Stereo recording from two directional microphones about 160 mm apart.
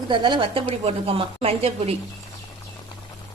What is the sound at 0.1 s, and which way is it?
Speech, 30° right (ahead or behind).